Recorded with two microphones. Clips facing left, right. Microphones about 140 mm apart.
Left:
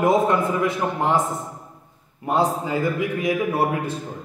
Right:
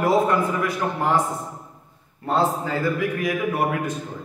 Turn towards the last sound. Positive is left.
turn(degrees=25)  # may be behind; listen again after turning